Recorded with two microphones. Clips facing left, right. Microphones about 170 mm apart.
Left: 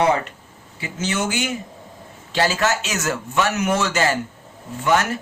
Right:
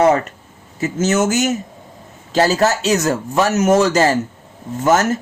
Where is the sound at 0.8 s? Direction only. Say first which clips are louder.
Right 8 dB; 45° right (ahead or behind).